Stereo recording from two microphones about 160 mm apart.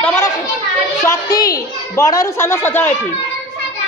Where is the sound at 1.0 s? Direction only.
20° left (ahead or behind).